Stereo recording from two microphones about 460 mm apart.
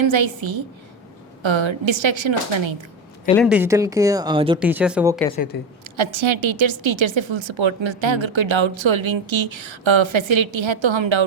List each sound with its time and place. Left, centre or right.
0.0 s a woman's voice: right
3.2 s speech: centre
5.8 s a woman's voice: right